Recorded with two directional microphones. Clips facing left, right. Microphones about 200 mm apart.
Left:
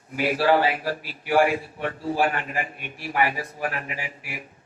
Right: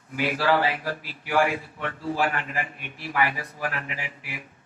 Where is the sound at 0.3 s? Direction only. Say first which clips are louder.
Left 3 dB; 30° left (ahead or behind).